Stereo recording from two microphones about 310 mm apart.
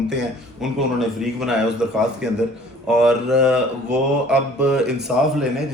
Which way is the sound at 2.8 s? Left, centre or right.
Centre.